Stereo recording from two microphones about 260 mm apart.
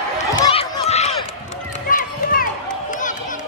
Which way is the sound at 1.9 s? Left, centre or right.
Left.